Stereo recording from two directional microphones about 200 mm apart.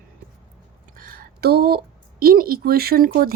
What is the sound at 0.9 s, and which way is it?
A woman's voice, 45° right (ahead or behind).